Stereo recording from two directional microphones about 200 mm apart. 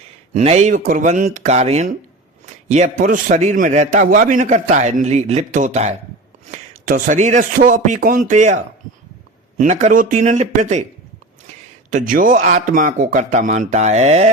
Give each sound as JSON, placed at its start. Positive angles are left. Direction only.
{"t": 0.3, "sound": "a man's voice", "side_deg": -35}
{"t": 11.9, "sound": "a man's voice", "side_deg": -40}